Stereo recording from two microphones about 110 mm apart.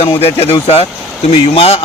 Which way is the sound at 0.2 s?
65° left (ahead or behind).